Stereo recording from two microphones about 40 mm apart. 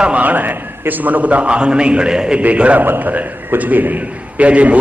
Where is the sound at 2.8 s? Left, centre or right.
Right.